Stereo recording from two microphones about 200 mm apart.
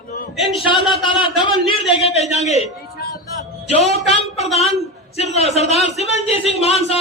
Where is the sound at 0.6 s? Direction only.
25° left (ahead or behind).